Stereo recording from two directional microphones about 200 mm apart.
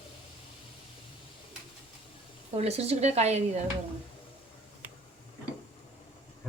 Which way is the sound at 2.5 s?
30° right (ahead or behind).